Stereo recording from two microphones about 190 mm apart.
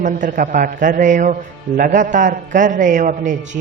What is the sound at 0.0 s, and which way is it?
Speech, 45° right (ahead or behind).